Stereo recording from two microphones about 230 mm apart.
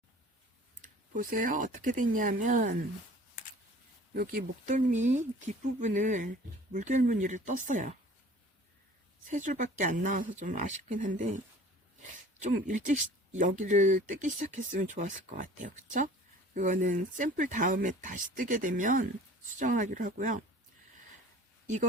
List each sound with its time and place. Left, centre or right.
0.8 s speech: right
4.1 s speech: right
9.2 s speech: right
12.4 s speech: right